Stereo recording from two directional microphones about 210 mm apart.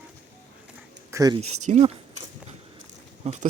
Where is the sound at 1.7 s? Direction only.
30° right (ahead or behind).